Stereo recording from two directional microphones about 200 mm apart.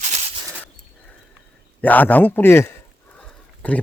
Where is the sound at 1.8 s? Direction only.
10° left (ahead or behind).